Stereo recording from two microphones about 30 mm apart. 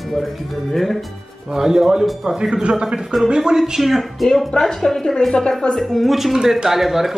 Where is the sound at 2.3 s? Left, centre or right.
Right.